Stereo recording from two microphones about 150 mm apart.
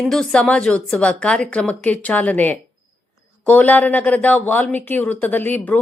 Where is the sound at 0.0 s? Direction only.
5° left (ahead or behind).